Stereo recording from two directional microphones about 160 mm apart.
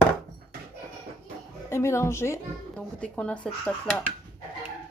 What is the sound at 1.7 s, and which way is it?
A woman's voice, 15° left (ahead or behind).